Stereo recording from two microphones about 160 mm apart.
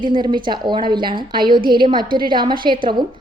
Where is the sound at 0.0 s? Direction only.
30° right (ahead or behind).